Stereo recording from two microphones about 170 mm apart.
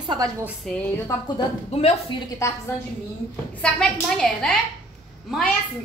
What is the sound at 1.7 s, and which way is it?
Speech, 35° left (ahead or behind).